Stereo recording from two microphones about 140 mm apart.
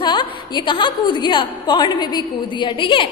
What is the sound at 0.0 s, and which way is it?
A woman's voice, 35° left (ahead or behind).